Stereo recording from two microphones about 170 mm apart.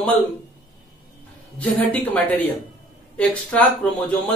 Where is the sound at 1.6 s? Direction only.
10° left (ahead or behind).